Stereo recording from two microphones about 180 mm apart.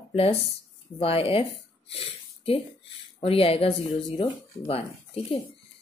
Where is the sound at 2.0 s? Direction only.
30° left (ahead or behind).